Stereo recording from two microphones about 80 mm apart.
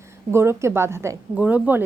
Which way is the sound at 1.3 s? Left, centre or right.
Centre.